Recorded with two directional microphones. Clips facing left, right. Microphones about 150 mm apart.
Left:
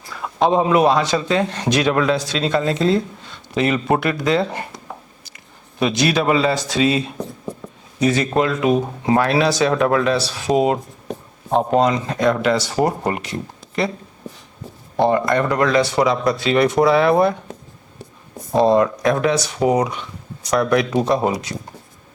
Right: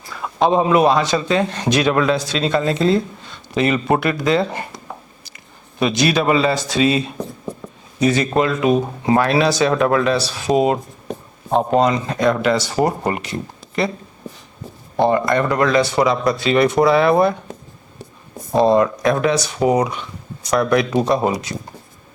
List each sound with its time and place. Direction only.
0.1 s a man's voice: 15° right (ahead or behind)
5.8 s a man's voice: 10° right (ahead or behind)
12.9 s speech: 25° right (ahead or behind)
13.1 s speech: 10° right (ahead or behind)
15.3 s a man's voice: 10° right (ahead or behind)